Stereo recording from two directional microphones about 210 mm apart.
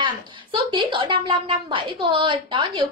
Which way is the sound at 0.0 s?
25° right (ahead or behind).